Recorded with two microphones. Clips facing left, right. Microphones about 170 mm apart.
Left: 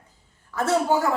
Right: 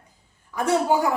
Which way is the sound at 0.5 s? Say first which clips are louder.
Right 1 dB; 15° right (ahead or behind).